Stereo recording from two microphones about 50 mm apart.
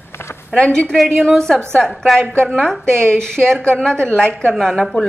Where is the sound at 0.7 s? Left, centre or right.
Centre.